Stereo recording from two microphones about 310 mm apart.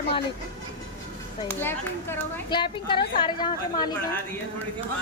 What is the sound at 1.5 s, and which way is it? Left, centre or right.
A woman's voice, centre.